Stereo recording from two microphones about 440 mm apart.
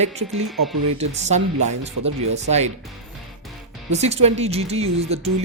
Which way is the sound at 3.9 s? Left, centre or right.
Centre.